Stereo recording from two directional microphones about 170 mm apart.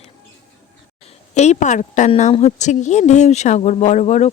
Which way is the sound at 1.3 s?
40° left (ahead or behind).